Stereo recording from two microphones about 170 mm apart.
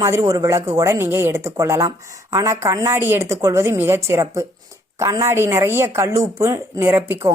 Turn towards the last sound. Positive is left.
turn(degrees=-15)  # may be behind; listen again after turning